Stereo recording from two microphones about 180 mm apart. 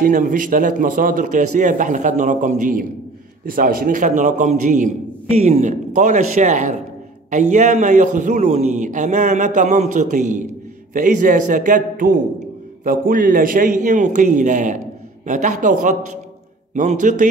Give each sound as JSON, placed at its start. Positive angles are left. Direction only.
{"t": 0.0, "sound": "a man's voice", "side_deg": -50}